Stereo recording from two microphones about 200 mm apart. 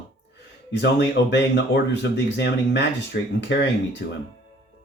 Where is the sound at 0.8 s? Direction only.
60° left (ahead or behind).